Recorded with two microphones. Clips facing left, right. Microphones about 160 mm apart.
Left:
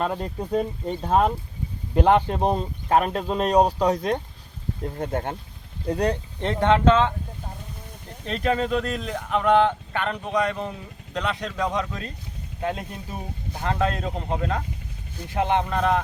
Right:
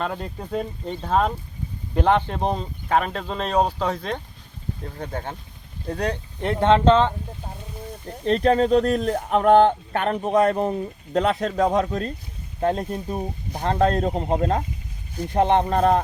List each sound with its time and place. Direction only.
0.0 s speech: 5° left (ahead or behind)
4.9 s speech: 20° left (ahead or behind)
6.4 s speech: 15° right (ahead or behind); by 7.1 s 30° right (ahead or behind)
8.4 s speech: 40° right (ahead or behind)